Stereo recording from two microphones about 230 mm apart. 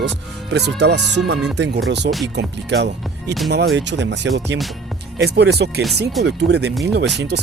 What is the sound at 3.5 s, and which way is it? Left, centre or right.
Speech, right.